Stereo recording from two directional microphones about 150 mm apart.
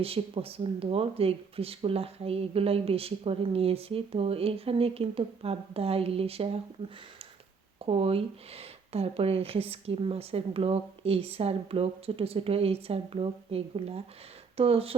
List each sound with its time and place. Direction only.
0.0 s speech: 40° right (ahead or behind)
7.9 s speech: 40° right (ahead or behind)